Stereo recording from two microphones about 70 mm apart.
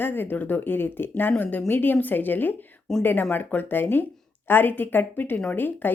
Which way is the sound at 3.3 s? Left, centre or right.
Left.